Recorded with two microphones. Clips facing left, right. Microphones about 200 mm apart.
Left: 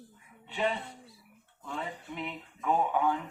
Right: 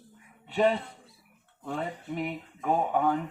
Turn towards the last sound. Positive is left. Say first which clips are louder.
# right 2 dB
turn(degrees=-45)  # may be behind; listen again after turning